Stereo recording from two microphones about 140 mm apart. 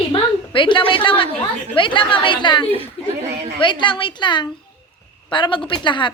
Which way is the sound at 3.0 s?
45° left (ahead or behind).